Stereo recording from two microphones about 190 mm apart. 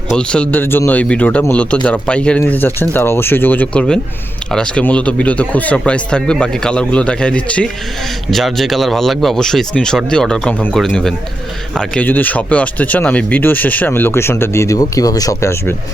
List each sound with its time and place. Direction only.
0.2 s speech: 5° left (ahead or behind)